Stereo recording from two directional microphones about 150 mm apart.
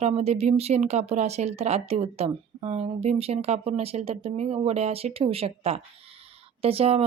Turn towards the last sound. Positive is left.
turn(degrees=-40)  # may be behind; listen again after turning